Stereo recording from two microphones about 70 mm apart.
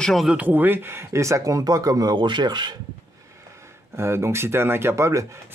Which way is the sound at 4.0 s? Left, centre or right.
Right.